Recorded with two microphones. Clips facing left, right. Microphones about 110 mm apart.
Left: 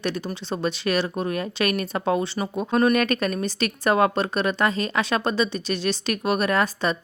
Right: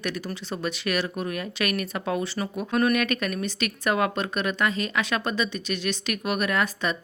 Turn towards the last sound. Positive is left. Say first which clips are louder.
# left 3 dB
turn(degrees=35)  # may be behind; listen again after turning